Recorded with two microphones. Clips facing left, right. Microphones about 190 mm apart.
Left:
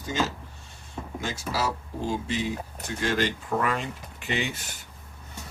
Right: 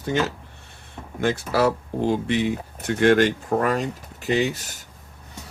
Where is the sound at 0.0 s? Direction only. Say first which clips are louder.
Right 5 dB; 60° right (ahead or behind); by 4.8 s 40° right (ahead or behind).